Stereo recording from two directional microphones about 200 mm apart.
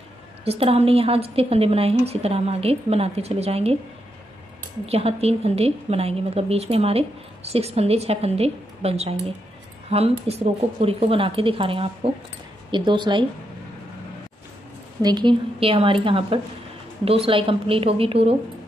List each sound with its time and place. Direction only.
0.5 s a woman's voice: 30° right (ahead or behind)
4.8 s a woman's voice: 30° right (ahead or behind)
15.0 s a woman's voice: 20° right (ahead or behind)